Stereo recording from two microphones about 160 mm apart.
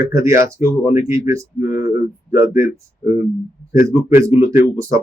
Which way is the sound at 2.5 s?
50° left (ahead or behind).